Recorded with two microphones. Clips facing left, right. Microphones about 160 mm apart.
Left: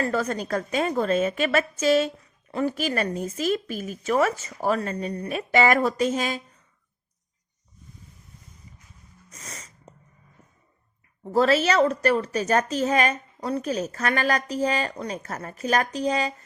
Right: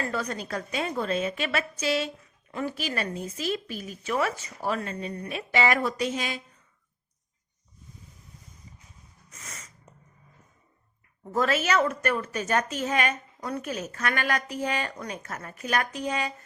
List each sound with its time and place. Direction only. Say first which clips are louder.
0.0 s speech: left 5 dB; 40° left (ahead or behind)
9.3 s sneeze: left 3 dB; 35° left (ahead or behind)
11.3 s a woman's voice: left 5 dB; 35° left (ahead or behind)